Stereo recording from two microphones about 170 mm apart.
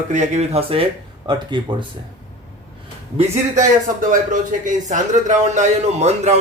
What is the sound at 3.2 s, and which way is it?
A man's voice, 45° right (ahead or behind).